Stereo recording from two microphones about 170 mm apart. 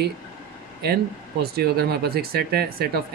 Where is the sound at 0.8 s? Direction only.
65° right (ahead or behind).